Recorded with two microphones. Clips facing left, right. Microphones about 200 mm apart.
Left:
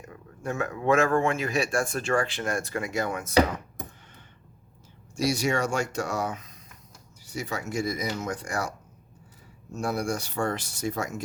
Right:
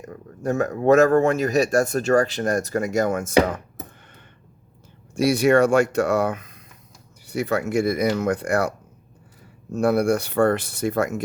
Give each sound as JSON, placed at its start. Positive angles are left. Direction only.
{"t": 0.0, "sound": "speech", "side_deg": -40}
{"t": 5.1, "sound": "speech", "side_deg": -60}
{"t": 9.7, "sound": "speech", "side_deg": -60}